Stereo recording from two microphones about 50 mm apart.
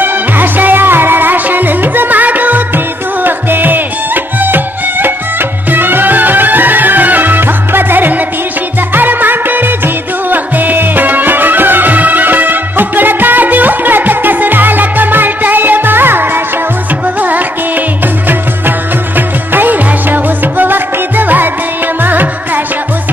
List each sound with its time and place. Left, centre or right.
0.0 s music: right
19.1 s music: right